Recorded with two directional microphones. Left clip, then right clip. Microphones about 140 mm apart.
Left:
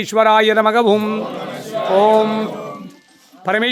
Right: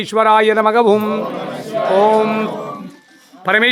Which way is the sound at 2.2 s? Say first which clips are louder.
Even; 15° left (ahead or behind).